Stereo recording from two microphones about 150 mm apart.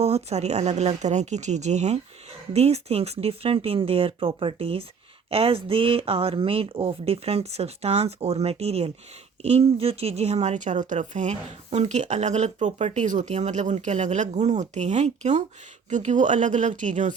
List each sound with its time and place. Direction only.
0.0 s speech: 45° right (ahead or behind)